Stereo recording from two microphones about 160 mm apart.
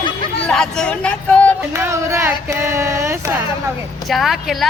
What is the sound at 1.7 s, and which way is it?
Speech, 15° right (ahead or behind).